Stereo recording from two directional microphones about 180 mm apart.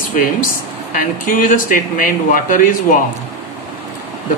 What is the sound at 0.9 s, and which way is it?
Speech, 50° left (ahead or behind).